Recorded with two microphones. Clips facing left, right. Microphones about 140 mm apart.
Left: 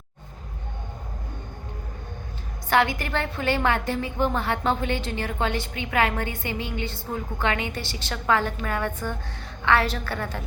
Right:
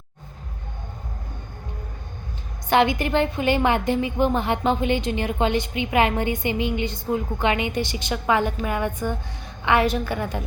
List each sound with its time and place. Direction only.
2.6 s a woman's voice: 20° right (ahead or behind)